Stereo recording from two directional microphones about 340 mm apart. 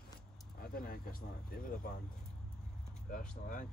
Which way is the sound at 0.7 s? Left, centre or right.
Left.